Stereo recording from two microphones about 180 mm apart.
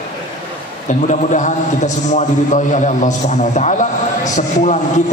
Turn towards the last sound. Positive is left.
turn(degrees=40)  # may be behind; listen again after turning